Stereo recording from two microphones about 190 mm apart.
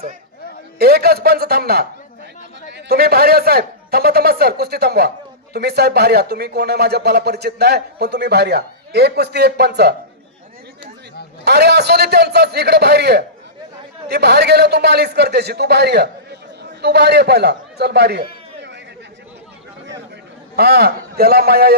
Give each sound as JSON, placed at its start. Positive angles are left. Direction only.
{"t": 0.8, "sound": "speech", "side_deg": -55}
{"t": 11.4, "sound": "speech", "side_deg": -60}
{"t": 20.6, "sound": "speech", "side_deg": -55}